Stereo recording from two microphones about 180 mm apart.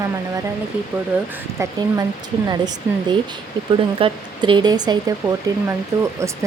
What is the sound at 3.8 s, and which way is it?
Speech, 30° right (ahead or behind).